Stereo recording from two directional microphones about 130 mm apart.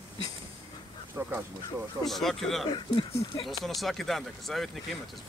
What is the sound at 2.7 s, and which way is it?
Speech, 40° left (ahead or behind).